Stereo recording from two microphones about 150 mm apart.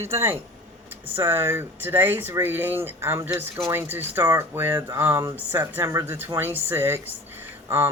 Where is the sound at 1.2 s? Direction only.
15° right (ahead or behind).